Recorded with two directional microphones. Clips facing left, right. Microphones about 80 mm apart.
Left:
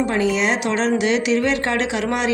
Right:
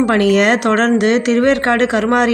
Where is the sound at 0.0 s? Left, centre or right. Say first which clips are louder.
Right 7 dB; right.